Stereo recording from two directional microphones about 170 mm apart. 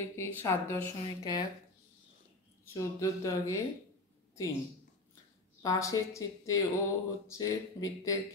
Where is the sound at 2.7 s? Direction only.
20° left (ahead or behind).